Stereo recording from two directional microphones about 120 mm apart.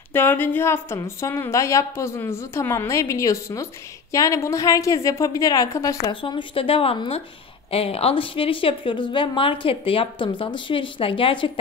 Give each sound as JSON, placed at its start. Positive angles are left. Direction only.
{"t": 0.1, "sound": "a woman's voice", "side_deg": 15}
{"t": 6.0, "sound": "a woman's voice", "side_deg": 45}